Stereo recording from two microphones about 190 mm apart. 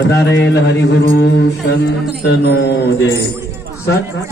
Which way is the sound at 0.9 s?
65° left (ahead or behind).